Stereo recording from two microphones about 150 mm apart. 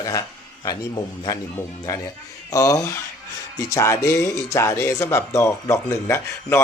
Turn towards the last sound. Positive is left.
turn(degrees=20)  # may be behind; listen again after turning